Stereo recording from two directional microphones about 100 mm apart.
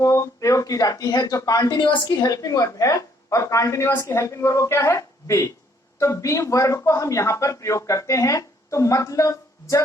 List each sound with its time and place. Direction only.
0.0 s a man's voice: 30° left (ahead or behind)
1.8 s a woman's voice: 50° left (ahead or behind)
2.3 s a man's voice: 35° left (ahead or behind)